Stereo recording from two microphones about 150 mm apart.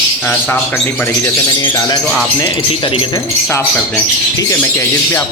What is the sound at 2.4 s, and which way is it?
Speech, 35° left (ahead or behind).